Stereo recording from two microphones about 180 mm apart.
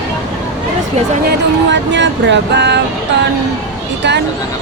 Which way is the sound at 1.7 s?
85° right.